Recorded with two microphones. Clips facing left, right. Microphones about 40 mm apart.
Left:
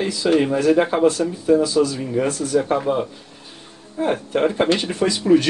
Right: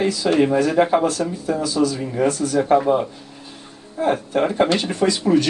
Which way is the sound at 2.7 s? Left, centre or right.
Centre.